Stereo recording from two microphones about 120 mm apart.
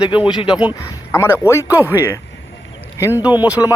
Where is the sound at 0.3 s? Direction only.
40° left (ahead or behind).